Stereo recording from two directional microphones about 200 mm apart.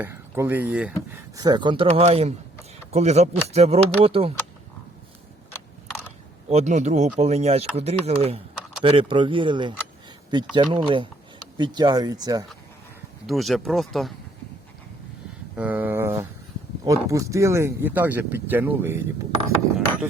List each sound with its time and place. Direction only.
0.0 s speech: 10° right (ahead or behind)
1.4 s speech: 20° right (ahead or behind)
6.5 s speech: 35° right (ahead or behind)
13.2 s speech: centre (ahead or behind)
15.5 s speech: 10° right (ahead or behind)